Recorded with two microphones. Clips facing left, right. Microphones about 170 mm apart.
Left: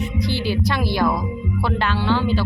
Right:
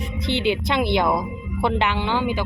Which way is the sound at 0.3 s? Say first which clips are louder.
Right 3 dB; 20° right (ahead or behind).